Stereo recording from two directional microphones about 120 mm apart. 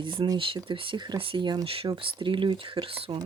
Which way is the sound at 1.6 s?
50° right (ahead or behind).